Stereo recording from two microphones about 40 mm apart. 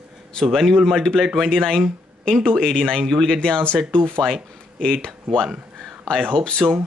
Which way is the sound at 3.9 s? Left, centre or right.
Left.